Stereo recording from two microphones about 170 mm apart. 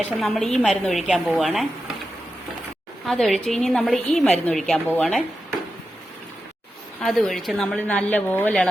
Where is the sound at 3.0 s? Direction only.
Centre (ahead or behind).